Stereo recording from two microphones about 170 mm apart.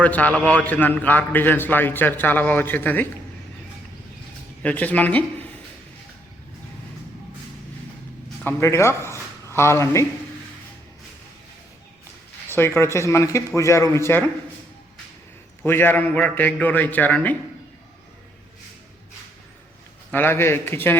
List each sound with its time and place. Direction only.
0.0 s a man's voice: 10° left (ahead or behind)
4.6 s a man's voice: 10° left (ahead or behind)
8.4 s a man's voice: 15° left (ahead or behind)
12.5 s a man's voice: 15° left (ahead or behind)
15.6 s a man's voice: 10° left (ahead or behind)
20.1 s a man's voice: 10° left (ahead or behind)